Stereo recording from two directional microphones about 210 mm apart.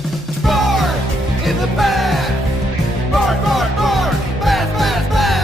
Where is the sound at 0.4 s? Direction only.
Centre (ahead or behind).